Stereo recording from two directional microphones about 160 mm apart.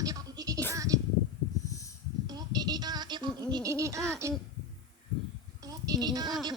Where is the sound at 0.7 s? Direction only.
20° right (ahead or behind).